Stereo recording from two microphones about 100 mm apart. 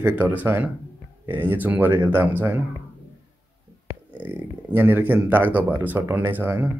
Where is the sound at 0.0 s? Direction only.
20° right (ahead or behind).